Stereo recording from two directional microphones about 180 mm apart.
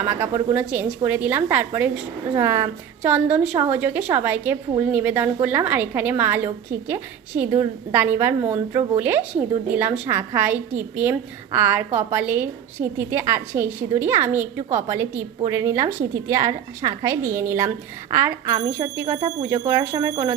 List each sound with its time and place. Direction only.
0.0 s a woman's voice: 10° right (ahead or behind)